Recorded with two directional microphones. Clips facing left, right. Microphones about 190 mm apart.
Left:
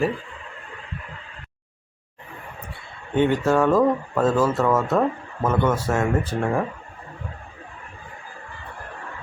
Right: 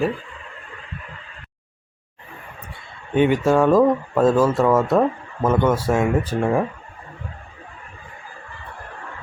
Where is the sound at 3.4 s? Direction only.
10° right (ahead or behind).